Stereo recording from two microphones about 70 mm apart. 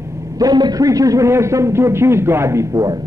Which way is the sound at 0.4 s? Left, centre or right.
Right.